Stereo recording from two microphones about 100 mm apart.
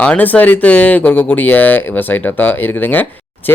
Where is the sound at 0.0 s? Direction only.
15° left (ahead or behind).